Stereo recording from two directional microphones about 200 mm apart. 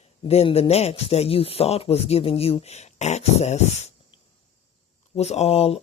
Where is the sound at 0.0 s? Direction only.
30° left (ahead or behind).